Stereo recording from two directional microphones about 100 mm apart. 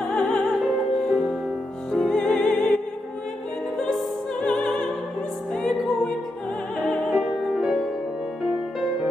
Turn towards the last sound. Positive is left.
turn(degrees=-5)  # may be behind; listen again after turning